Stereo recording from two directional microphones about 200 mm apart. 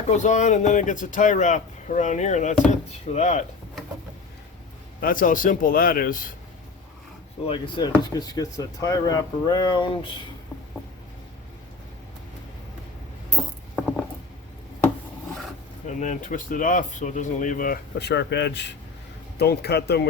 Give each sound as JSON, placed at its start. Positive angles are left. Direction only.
{"t": 0.1, "sound": "speech", "side_deg": 35}
{"t": 4.9, "sound": "a man's voice", "side_deg": 45}
{"t": 7.4, "sound": "speech", "side_deg": 25}
{"t": 15.9, "sound": "a man's voice", "side_deg": 40}